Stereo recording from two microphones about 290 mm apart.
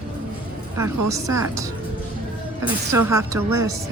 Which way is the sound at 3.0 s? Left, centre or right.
Centre.